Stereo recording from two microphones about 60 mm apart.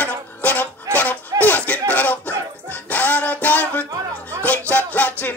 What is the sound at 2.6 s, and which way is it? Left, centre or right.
Music, left.